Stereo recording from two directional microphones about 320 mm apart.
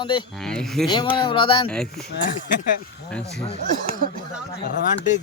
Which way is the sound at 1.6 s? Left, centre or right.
Centre.